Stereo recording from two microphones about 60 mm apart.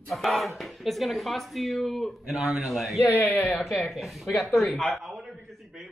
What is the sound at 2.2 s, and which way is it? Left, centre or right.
Speech, centre.